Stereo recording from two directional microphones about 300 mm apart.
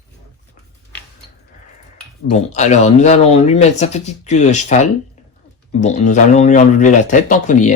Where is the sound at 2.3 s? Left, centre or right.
Left.